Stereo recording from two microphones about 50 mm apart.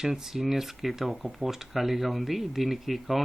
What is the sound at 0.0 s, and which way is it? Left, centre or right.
Speech, centre.